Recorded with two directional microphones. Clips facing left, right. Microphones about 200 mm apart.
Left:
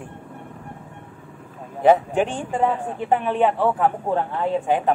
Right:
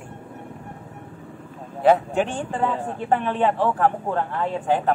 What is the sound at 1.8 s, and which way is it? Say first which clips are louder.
A man's voice: left 2 dB; 15° left (ahead or behind).